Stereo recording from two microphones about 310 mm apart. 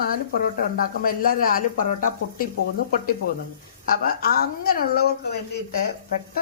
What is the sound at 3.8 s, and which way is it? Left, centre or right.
A man's voice, left.